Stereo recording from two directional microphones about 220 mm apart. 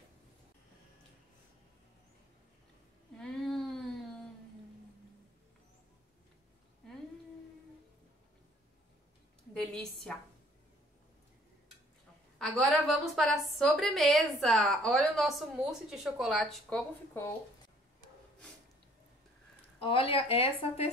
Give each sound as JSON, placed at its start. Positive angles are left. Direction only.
{"t": 3.2, "sound": "a sound", "side_deg": 5}
{"t": 9.5, "sound": "a woman's voice", "side_deg": 5}
{"t": 12.4, "sound": "a woman's voice", "side_deg": 0}
{"t": 19.8, "sound": "speech", "side_deg": 25}